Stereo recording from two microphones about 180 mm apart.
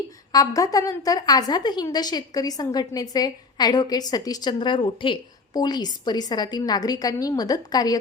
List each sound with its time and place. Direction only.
0.3 s a woman's voice: 20° left (ahead or behind)